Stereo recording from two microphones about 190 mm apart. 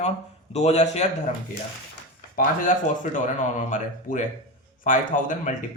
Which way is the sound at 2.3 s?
40° left (ahead or behind).